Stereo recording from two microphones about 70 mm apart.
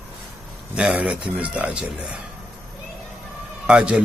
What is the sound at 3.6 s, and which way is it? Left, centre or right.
Speech, centre.